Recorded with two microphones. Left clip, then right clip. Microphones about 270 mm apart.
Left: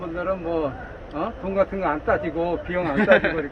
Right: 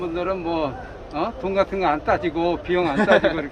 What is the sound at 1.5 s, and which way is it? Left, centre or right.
Speech, centre.